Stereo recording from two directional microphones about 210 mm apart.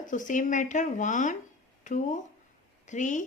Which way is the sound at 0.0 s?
40° left (ahead or behind).